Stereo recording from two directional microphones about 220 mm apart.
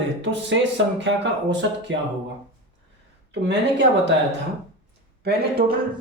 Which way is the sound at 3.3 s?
55° right (ahead or behind).